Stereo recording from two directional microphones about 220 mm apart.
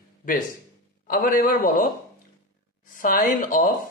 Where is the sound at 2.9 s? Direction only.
40° left (ahead or behind).